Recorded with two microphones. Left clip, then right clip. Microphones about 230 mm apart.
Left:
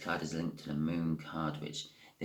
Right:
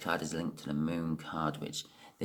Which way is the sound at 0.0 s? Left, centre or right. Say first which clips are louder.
Right 2 dB; right.